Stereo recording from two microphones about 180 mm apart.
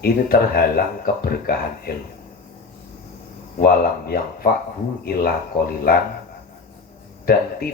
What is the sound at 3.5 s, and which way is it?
Speech, 55° left (ahead or behind).